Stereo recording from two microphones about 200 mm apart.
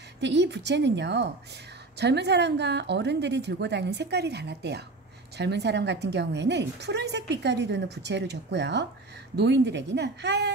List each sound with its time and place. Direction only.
0.2 s a woman's voice: 60° right (ahead or behind)